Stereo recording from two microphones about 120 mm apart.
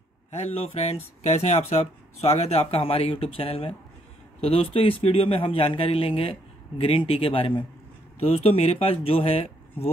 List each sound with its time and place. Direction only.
0.3 s a man's voice: 60° left (ahead or behind)
8.2 s a man's voice: 60° left (ahead or behind)